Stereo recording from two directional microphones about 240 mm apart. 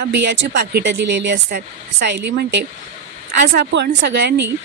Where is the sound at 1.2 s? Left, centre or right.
Right.